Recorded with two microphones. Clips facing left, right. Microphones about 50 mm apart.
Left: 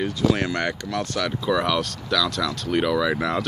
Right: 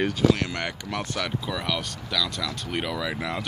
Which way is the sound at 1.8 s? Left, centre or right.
Centre.